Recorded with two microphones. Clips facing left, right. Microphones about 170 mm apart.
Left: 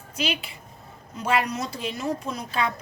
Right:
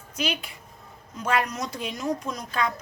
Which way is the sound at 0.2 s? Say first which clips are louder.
Left 1 dB; 5° left (ahead or behind).